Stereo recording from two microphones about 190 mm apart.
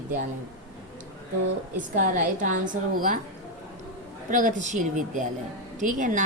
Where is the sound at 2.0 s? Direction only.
40° right (ahead or behind).